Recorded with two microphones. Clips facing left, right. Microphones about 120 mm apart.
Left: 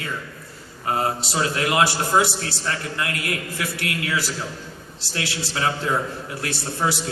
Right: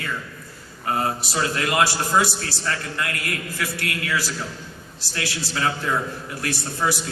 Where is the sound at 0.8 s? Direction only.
25° left (ahead or behind).